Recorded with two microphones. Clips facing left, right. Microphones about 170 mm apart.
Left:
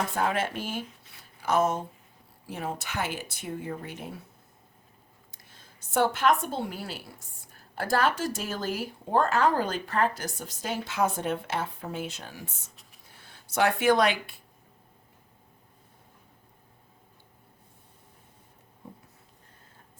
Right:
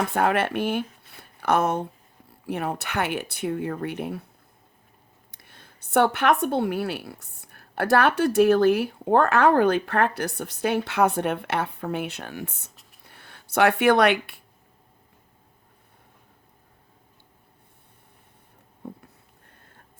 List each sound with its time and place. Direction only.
0.1 s a woman's voice: 65° right (ahead or behind)
5.3 s a woman's voice: 60° right (ahead or behind)
18.8 s a sound: 65° right (ahead or behind)